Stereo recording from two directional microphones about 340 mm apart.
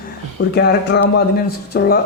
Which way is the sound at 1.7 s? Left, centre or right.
Left.